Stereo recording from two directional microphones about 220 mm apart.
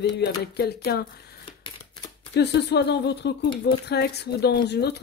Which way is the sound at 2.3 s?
50° left (ahead or behind).